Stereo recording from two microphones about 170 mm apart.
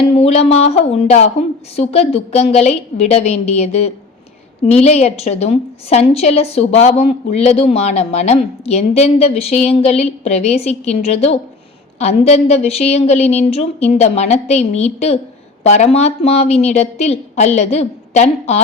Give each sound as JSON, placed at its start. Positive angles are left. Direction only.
{"t": 0.2, "sound": "a woman's voice", "side_deg": 40}